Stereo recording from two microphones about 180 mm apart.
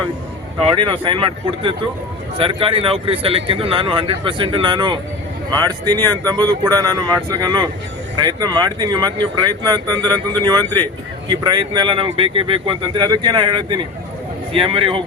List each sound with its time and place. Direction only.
0.6 s speech: 30° right (ahead or behind)
11.3 s speech: 25° right (ahead or behind)